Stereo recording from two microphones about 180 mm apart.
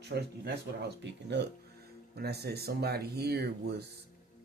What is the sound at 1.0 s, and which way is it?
Speech, 70° right (ahead or behind).